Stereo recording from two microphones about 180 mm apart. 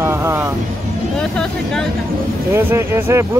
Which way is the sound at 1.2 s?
5° left (ahead or behind).